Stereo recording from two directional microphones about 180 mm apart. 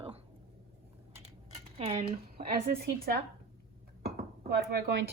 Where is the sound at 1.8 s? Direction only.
35° right (ahead or behind).